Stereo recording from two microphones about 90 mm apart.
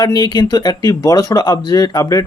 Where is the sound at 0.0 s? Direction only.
50° left (ahead or behind).